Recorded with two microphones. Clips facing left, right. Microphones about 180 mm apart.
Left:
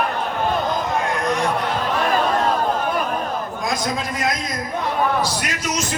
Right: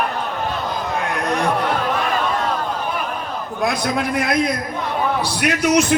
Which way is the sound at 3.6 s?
60° right (ahead or behind).